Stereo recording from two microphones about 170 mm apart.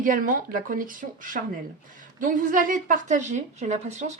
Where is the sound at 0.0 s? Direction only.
50° right (ahead or behind).